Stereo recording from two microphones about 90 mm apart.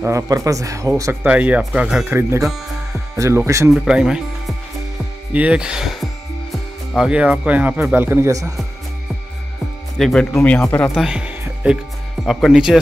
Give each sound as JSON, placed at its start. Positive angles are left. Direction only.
{"t": 0.0, "sound": "a man's voice", "side_deg": -35}
{"t": 1.2, "sound": "speech", "side_deg": -15}
{"t": 2.0, "sound": "speech", "side_deg": -25}
{"t": 3.7, "sound": "speech", "side_deg": -10}
{"t": 5.3, "sound": "speech", "side_deg": -15}
{"t": 8.3, "sound": "a man's voice", "side_deg": -40}
{"t": 9.9, "sound": "speech", "side_deg": 5}
{"t": 11.0, "sound": "speech", "side_deg": -10}